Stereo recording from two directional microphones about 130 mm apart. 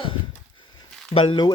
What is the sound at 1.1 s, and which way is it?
Speech, 40° left (ahead or behind).